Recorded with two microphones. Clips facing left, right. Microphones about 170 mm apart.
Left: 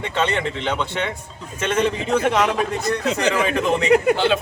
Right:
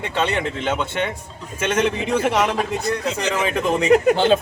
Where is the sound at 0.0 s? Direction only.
5° right (ahead or behind).